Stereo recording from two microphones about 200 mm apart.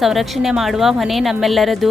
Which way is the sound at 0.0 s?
Centre (ahead or behind).